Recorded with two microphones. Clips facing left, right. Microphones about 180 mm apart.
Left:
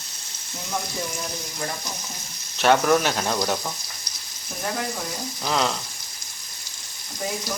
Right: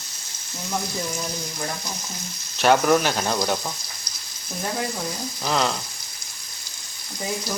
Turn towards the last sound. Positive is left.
turn(degrees=0)  # may be behind; listen again after turning